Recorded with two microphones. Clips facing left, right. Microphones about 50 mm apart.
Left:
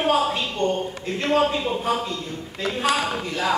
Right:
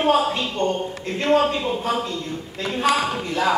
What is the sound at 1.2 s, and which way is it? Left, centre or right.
Speech, centre.